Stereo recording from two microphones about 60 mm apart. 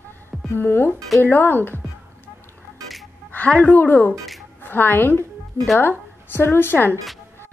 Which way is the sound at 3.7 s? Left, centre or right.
Left.